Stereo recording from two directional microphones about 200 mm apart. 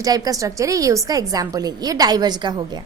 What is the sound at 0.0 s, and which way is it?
A woman's voice, 15° right (ahead or behind).